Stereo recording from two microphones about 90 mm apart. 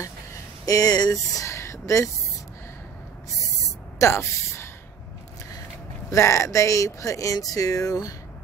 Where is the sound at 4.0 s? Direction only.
30° left (ahead or behind).